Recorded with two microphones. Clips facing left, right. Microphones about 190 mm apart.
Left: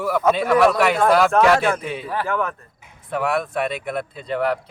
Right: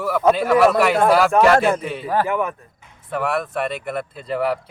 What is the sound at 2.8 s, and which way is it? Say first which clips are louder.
Speech: left 1 dB; centre (ahead or behind).